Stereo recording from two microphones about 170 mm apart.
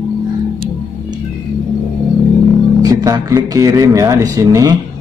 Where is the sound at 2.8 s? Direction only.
20° right (ahead or behind).